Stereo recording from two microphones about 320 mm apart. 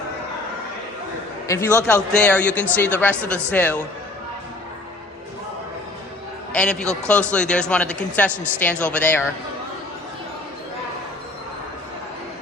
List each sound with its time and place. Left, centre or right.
1.7 s a man's voice: centre
6.5 s a man's voice: centre